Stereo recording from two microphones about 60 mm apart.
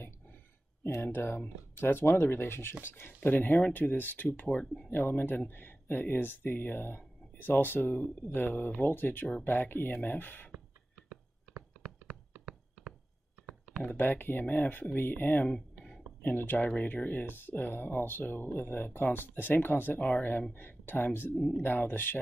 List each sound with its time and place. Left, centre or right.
1.0 s speech: left
13.8 s speech: left
15.4 s a sound: centre
16.2 s speech: left
21.4 s speech: centre
21.6 s speech: left